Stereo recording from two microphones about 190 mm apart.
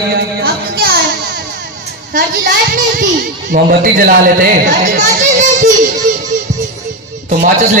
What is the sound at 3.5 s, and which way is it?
Speech, 45° right (ahead or behind).